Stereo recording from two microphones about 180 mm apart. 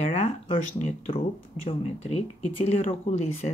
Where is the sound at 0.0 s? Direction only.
40° left (ahead or behind).